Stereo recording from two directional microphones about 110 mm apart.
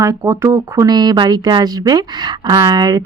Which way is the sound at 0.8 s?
40° right (ahead or behind).